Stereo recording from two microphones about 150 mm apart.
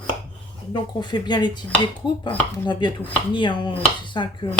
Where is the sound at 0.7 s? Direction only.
30° left (ahead or behind).